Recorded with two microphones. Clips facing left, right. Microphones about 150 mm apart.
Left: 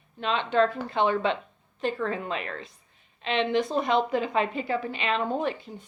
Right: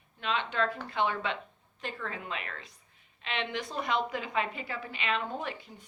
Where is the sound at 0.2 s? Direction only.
30° left (ahead or behind).